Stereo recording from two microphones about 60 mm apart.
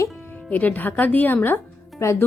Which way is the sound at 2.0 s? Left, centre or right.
Left.